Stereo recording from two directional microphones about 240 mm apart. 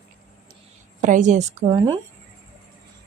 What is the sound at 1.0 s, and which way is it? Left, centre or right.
Speech, right.